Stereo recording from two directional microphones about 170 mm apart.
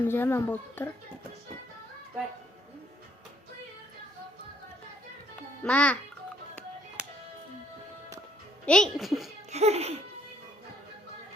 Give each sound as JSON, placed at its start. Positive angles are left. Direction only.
{"t": 0.0, "sound": "a woman's voice", "side_deg": 10}
{"t": 5.6, "sound": "a woman's voice", "side_deg": 5}
{"t": 7.0, "sound": "music", "side_deg": -5}
{"t": 8.6, "sound": "a child's voice", "side_deg": 5}
{"t": 9.5, "sound": "speech", "side_deg": -40}